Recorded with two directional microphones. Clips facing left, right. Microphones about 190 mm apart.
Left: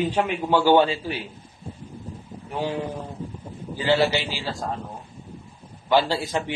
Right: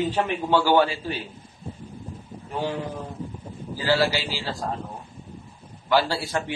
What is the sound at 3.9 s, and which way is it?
Speech, 20° left (ahead or behind).